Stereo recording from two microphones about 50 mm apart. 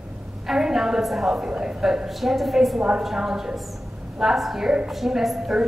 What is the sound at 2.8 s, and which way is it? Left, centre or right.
A woman's voice, centre.